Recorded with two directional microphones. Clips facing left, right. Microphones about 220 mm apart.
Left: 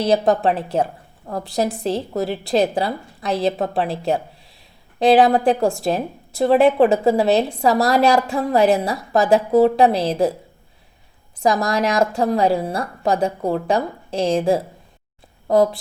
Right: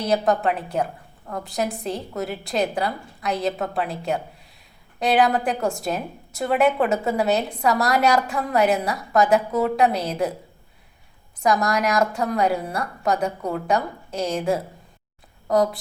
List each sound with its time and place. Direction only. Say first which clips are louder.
0.0 s a woman's voice: left 4 dB; 30° left (ahead or behind)
11.3 s a woman's voice: left 2 dB; 30° left (ahead or behind)